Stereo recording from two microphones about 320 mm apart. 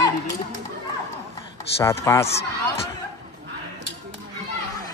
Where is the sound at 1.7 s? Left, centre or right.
Centre.